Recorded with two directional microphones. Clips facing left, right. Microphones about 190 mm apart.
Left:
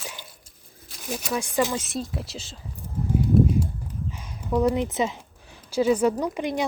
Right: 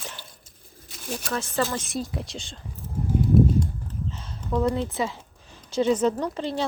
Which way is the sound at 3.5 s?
10° left (ahead or behind).